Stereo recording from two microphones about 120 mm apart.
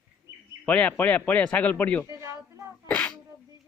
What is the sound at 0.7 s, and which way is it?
Speech, 10° left (ahead or behind).